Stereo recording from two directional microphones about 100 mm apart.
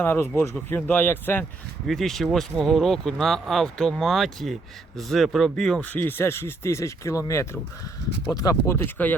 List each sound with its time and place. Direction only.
0.0 s speech: 20° left (ahead or behind)
1.9 s speech: centre (ahead or behind)
5.9 s speech: 20° left (ahead or behind)